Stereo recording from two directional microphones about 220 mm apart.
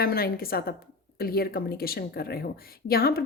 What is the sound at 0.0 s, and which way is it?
A woman's voice, 45° left (ahead or behind).